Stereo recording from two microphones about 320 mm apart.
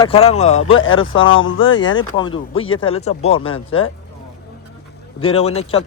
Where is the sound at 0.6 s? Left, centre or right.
Left.